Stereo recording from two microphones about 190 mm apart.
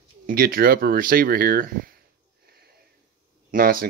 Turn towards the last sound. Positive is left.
turn(degrees=-50)  # may be behind; listen again after turning